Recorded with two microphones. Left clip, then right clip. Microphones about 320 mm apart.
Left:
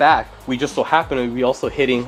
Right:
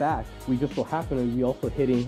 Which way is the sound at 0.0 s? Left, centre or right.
Centre.